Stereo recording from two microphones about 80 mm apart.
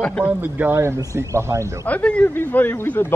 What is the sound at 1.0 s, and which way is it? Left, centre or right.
Speech, right.